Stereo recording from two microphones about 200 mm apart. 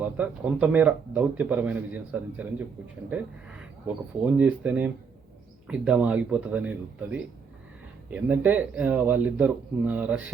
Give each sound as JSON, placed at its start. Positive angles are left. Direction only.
{"t": 0.0, "sound": "a man's voice", "side_deg": -5}
{"t": 4.4, "sound": "a man's voice", "side_deg": -5}